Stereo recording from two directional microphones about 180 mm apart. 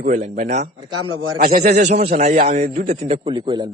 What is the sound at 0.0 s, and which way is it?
A man's voice, 45° right (ahead or behind).